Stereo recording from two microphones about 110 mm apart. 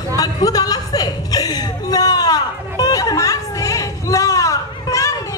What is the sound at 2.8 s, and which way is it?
Chatter, 35° left (ahead or behind).